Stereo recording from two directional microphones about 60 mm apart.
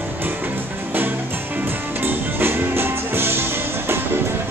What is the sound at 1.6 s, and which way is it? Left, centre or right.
Music, right.